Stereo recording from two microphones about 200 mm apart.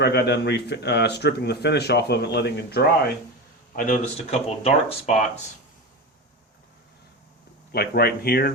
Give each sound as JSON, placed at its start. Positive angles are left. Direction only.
{"t": 0.0, "sound": "speech", "side_deg": 55}
{"t": 3.8, "sound": "speech", "side_deg": 40}
{"t": 7.7, "sound": "speech", "side_deg": 50}